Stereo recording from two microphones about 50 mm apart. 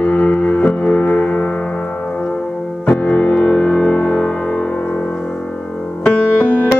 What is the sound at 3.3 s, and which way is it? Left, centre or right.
Singing bowl, centre.